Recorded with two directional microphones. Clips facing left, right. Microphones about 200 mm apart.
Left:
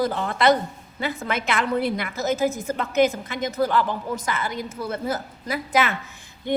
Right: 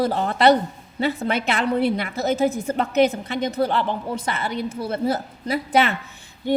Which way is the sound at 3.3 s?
30° right (ahead or behind).